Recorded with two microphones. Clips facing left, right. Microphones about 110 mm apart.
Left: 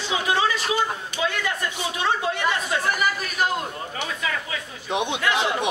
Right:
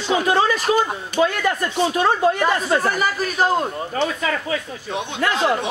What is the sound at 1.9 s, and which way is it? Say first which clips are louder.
Speech: right 5 dB; 45° right (ahead or behind).